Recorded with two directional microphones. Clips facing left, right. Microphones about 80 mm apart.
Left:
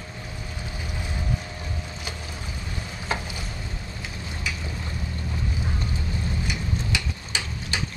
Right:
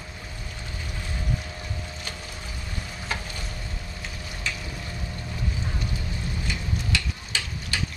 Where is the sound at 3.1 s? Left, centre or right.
Left.